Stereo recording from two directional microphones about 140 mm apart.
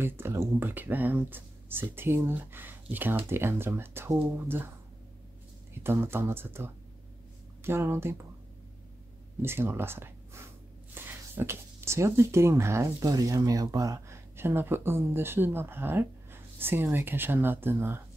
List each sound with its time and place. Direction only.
0.0 s speech: 20° right (ahead or behind)
5.9 s speech: 15° right (ahead or behind)
9.4 s speech: 15° right (ahead or behind)